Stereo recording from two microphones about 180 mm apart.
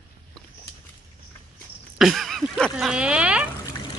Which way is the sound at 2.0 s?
Centre (ahead or behind).